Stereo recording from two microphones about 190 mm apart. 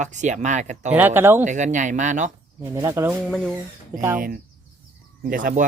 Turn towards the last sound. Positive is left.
turn(degrees=-45)  # may be behind; listen again after turning